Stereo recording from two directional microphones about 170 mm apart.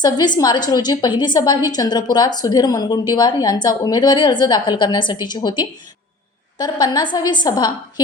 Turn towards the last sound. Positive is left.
turn(degrees=25)  # may be behind; listen again after turning